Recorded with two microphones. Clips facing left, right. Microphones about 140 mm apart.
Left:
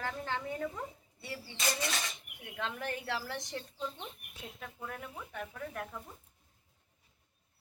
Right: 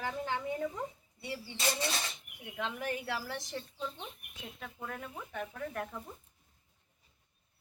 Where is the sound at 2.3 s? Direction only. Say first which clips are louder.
Right 1 dB; 15° right (ahead or behind).